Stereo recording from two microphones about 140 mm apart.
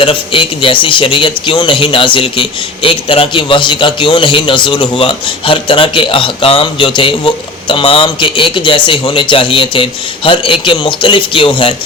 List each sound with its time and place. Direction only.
0.0 s speech: 40° left (ahead or behind)